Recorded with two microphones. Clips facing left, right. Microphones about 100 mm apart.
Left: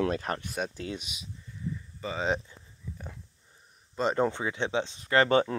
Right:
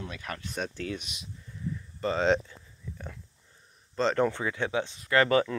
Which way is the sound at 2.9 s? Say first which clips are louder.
Even; 15° left (ahead or behind).